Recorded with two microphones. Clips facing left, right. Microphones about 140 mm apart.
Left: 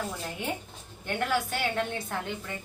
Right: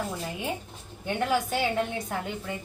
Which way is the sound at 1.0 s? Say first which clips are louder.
Right 2 dB; 15° right (ahead or behind).